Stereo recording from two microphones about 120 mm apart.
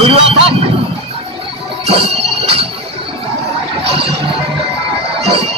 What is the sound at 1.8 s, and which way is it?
Music, 60° right (ahead or behind).